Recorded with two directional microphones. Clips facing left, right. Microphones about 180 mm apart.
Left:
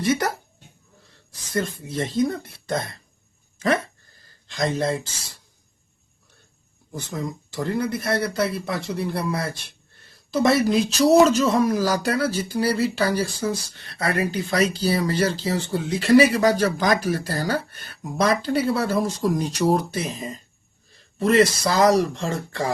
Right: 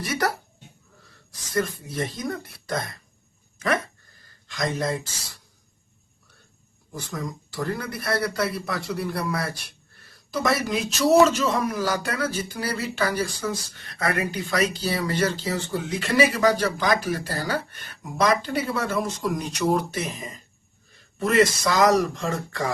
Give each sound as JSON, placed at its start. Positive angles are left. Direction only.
{"t": 0.0, "sound": "speech", "side_deg": 20}
{"t": 1.3, "sound": "speech", "side_deg": 25}
{"t": 3.6, "sound": "a sound", "side_deg": 30}
{"t": 6.9, "sound": "a man's voice", "side_deg": 25}